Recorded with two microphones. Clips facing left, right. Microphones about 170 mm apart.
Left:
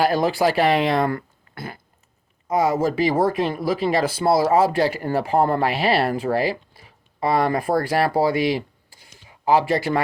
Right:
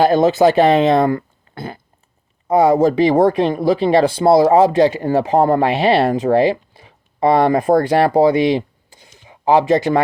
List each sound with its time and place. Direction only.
0.0 s speech: 25° right (ahead or behind)